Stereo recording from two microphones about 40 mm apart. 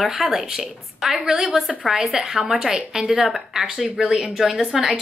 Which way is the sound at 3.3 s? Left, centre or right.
Centre.